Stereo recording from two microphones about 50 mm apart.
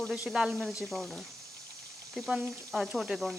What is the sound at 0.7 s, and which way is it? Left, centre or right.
Speech, centre.